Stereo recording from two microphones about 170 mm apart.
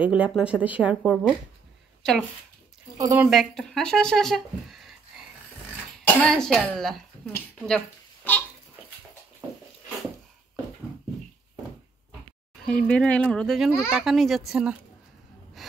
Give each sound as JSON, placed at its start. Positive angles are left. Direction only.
{"t": 0.0, "sound": "speech", "side_deg": -10}
{"t": 3.0, "sound": "speech", "side_deg": -10}
{"t": 3.3, "sound": "speech", "side_deg": 0}
{"t": 6.0, "sound": "speech", "side_deg": 5}
{"t": 7.3, "sound": "a sound", "side_deg": 5}
{"t": 12.6, "sound": "speech", "side_deg": 5}